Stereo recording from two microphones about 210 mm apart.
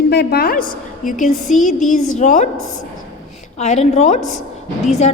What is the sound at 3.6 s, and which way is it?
Speech, 30° left (ahead or behind).